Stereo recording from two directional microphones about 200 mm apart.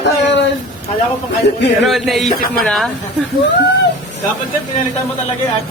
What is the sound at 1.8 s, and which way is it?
Speech, centre (ahead or behind).